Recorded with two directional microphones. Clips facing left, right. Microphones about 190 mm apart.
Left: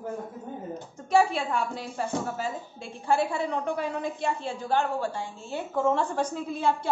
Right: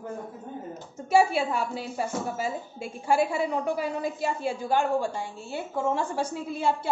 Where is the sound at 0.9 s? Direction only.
5° right (ahead or behind).